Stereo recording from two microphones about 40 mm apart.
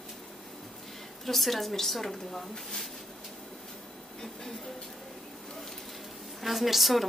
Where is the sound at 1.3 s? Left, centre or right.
Centre.